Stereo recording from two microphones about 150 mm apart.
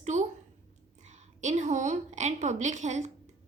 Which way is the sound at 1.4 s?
50° right (ahead or behind).